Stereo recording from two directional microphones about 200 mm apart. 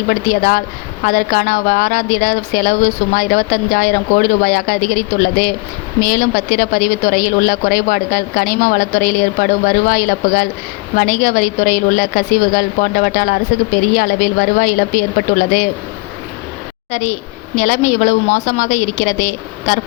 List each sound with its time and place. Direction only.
0.1 s a woman's voice: 45° left (ahead or behind)
16.9 s a woman's voice: 35° left (ahead or behind)